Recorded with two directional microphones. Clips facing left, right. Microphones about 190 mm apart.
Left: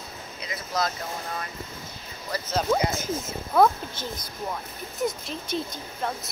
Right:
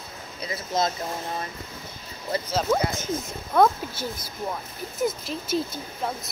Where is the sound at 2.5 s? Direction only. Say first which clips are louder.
Left 1 dB; centre (ahead or behind).